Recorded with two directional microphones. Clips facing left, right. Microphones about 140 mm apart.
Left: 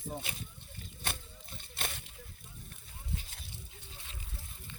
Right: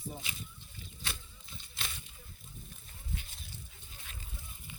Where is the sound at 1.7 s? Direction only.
60° left (ahead or behind).